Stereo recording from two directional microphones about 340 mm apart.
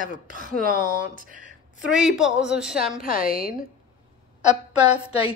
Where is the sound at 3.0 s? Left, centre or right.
Left.